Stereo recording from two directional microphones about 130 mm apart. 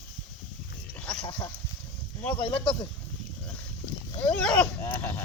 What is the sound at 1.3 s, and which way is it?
Speech, 35° left (ahead or behind).